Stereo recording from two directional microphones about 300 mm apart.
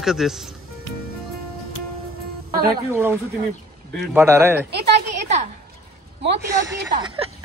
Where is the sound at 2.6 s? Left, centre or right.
Centre.